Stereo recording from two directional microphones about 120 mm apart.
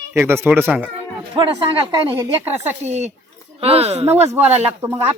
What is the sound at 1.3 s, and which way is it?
Speech, 45° right (ahead or behind).